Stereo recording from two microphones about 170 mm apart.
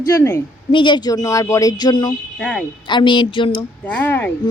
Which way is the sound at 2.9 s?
30° left (ahead or behind).